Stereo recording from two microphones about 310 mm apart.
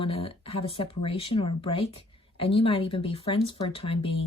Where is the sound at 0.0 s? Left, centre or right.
Centre.